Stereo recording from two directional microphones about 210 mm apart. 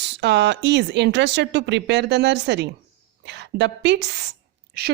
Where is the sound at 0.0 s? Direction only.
55° right (ahead or behind).